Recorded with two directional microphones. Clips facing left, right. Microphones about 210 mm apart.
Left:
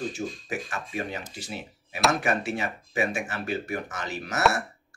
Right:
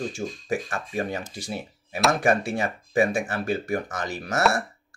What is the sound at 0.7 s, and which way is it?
Speech, 50° right (ahead or behind).